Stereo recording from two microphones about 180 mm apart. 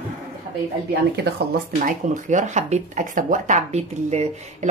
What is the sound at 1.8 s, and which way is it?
Speech, 40° right (ahead or behind).